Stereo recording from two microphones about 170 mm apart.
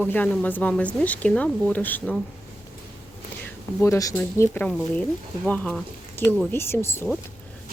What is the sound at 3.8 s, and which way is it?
Speech, 20° left (ahead or behind).